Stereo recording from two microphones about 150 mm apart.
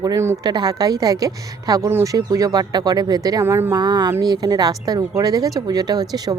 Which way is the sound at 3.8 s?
30° right (ahead or behind).